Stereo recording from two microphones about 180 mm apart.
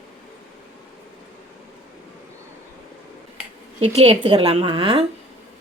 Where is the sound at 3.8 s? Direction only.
35° right (ahead or behind).